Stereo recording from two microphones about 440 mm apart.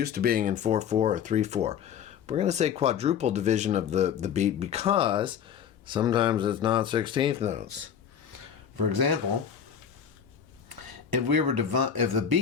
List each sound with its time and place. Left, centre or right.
0.0 s speech: right
8.3 s a sound: right
10.7 s speech: right